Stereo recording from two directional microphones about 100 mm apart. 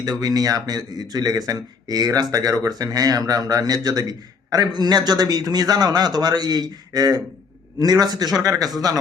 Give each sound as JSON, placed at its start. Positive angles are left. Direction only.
{"t": 0.0, "sound": "a man's voice", "side_deg": -40}